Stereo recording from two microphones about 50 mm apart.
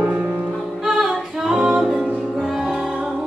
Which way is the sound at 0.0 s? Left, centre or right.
Centre.